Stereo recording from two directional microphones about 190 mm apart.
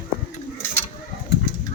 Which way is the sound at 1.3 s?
60° left (ahead or behind).